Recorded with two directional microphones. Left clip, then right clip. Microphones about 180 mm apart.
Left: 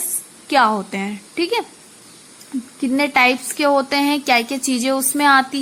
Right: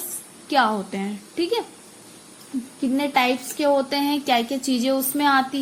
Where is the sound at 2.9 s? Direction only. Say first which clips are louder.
Left 6 dB; 25° left (ahead or behind).